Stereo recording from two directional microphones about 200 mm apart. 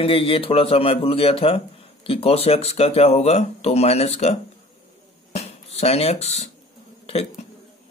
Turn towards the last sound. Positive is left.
turn(degrees=30)  # may be behind; listen again after turning